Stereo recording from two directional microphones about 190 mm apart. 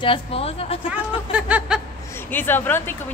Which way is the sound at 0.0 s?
30° left (ahead or behind).